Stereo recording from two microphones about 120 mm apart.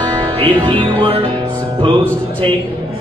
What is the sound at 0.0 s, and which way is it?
Music, 45° right (ahead or behind).